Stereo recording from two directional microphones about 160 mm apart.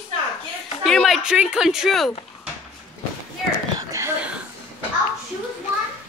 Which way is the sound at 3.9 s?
20° right (ahead or behind).